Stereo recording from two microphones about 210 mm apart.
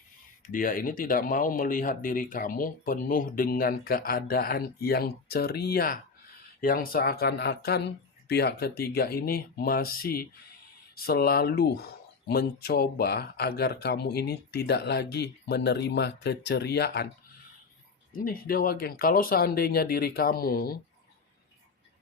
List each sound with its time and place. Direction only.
0.4 s speech: 40° left (ahead or behind)
18.2 s speech: 45° left (ahead or behind)